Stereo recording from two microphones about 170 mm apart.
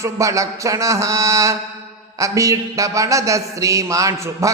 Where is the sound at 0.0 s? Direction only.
20° right (ahead or behind).